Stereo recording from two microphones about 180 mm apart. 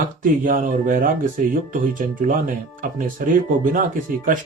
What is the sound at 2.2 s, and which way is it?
Speech, 50° right (ahead or behind).